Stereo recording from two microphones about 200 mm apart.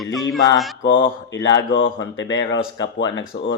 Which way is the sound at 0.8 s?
65° left (ahead or behind).